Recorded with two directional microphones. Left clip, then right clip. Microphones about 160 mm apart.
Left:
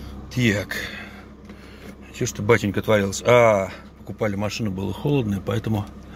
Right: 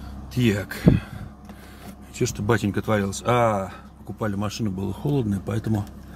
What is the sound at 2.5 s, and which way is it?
Speech, 20° right (ahead or behind).